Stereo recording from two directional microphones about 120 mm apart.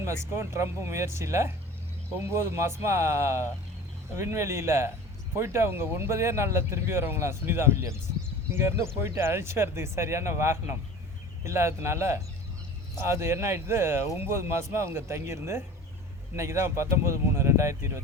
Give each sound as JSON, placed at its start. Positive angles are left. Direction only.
{"t": 0.0, "sound": "speech", "side_deg": -25}